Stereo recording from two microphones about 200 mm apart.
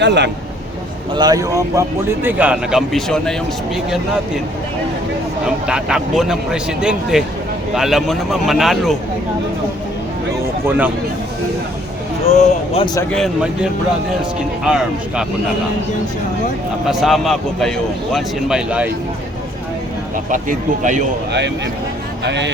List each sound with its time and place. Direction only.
0.0 s a man's voice: 60° right (ahead or behind)
1.1 s speech: 20° right (ahead or behind); by 3.3 s centre (ahead or behind)
5.5 s speech: 5° right (ahead or behind)
12.2 s speech: 35° left (ahead or behind)
12.8 s speech: 20° left (ahead or behind)
13.1 s speech: centre (ahead or behind)
16.8 s speech: centre (ahead or behind)
20.3 s speech: 40° right (ahead or behind)
22.2 s speech: 60° right (ahead or behind)